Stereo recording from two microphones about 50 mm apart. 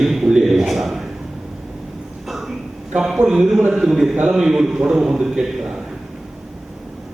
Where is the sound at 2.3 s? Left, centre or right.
Centre.